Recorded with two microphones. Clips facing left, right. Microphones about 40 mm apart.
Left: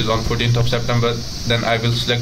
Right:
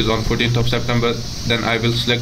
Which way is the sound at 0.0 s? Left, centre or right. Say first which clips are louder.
Right 1 dB; centre.